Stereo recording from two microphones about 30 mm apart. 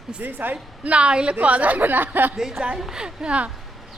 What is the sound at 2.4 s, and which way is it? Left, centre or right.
Speech, centre.